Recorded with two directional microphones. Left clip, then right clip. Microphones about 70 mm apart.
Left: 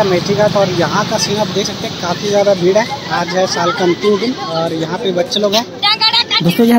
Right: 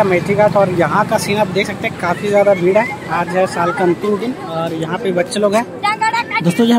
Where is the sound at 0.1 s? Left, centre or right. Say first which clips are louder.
Even; right.